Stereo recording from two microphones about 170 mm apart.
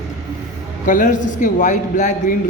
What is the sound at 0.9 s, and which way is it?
A man's voice, 50° left (ahead or behind).